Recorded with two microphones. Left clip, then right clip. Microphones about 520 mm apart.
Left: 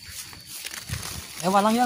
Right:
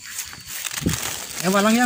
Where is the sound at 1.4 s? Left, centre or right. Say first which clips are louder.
Right 1 dB; left.